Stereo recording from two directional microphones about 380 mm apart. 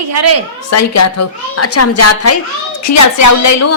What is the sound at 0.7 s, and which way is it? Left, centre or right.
A woman's voice, left.